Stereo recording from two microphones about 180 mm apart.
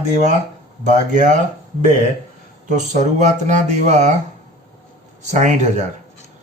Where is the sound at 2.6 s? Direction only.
40° right (ahead or behind).